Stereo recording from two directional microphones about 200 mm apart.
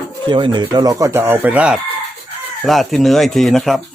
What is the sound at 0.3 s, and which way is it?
Speech, 25° right (ahead or behind).